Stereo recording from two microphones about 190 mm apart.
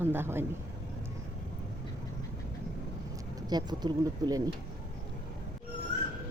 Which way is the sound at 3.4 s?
20° right (ahead or behind).